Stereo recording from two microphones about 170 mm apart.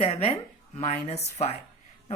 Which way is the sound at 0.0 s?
35° left (ahead or behind).